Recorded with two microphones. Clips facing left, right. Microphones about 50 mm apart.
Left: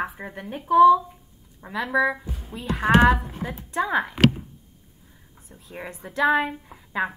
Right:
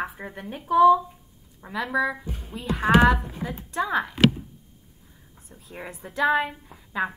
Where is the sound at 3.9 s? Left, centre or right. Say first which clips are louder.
Left 1 dB; left.